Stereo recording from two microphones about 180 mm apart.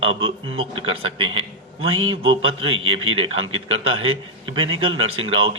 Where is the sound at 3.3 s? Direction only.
90° right.